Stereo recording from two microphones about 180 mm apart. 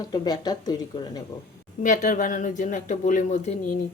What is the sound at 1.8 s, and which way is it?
Speech, 50° left (ahead or behind).